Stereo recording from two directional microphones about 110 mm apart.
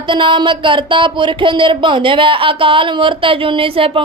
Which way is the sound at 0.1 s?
50° right (ahead or behind).